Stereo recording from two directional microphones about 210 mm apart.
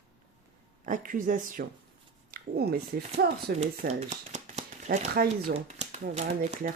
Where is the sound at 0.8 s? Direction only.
40° right (ahead or behind).